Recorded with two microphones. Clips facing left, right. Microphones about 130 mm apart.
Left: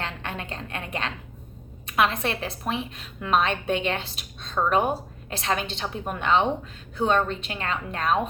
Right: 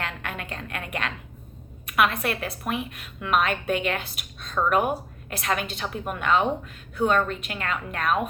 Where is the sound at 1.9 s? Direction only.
30° left (ahead or behind).